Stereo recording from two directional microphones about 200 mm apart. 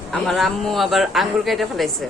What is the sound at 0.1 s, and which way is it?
Speech, centre (ahead or behind).